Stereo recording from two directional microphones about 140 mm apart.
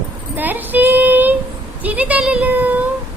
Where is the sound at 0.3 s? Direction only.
15° right (ahead or behind).